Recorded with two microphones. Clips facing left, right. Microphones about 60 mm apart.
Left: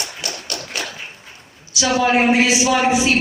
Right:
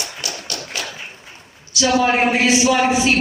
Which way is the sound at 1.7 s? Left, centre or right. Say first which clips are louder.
Right 2 dB; left.